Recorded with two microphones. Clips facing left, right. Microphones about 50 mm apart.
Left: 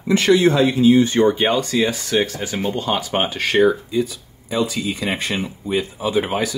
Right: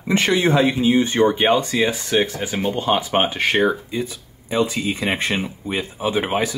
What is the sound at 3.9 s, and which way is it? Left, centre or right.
Speech, right.